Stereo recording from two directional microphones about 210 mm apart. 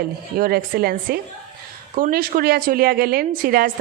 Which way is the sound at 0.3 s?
45° right (ahead or behind).